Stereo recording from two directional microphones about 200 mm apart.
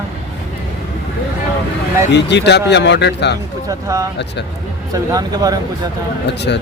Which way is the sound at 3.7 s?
15° right (ahead or behind).